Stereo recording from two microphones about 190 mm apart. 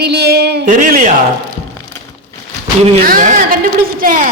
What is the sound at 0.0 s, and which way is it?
Speech, 60° right (ahead or behind).